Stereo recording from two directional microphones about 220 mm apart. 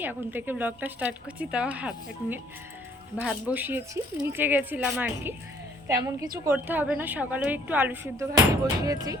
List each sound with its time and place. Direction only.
0.0 s speech: 10° right (ahead or behind)